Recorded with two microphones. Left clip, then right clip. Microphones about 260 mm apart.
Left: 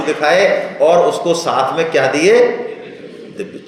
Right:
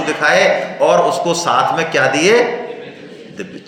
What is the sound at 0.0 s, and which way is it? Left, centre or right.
A man's voice, centre.